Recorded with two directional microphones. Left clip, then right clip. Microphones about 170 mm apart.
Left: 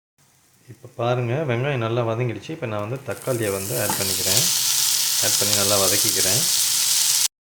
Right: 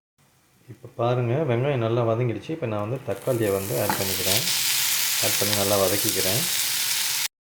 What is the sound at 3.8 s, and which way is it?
Stir, 15° right (ahead or behind).